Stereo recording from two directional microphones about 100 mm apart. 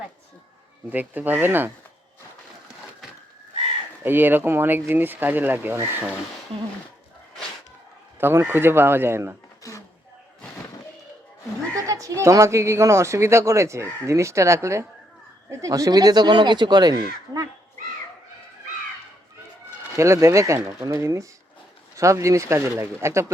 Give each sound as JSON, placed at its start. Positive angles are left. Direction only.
{"t": 0.9, "sound": "speech", "side_deg": -20}
{"t": 4.0, "sound": "speech", "side_deg": -20}
{"t": 8.2, "sound": "speech", "side_deg": -25}
{"t": 9.6, "sound": "a sound", "side_deg": 35}
{"t": 11.7, "sound": "speech", "side_deg": -30}
{"t": 20.0, "sound": "speech", "side_deg": -30}